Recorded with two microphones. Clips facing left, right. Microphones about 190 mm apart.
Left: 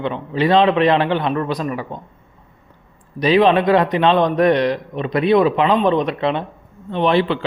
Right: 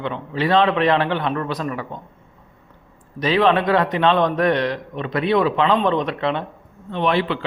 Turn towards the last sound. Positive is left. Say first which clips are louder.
# left 4 dB
turn(degrees=25)  # may be behind; listen again after turning